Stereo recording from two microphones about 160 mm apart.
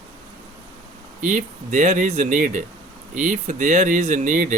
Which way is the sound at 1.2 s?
50° right (ahead or behind).